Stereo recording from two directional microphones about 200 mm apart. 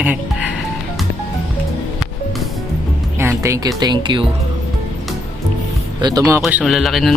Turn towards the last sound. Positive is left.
turn(degrees=0)  # may be behind; listen again after turning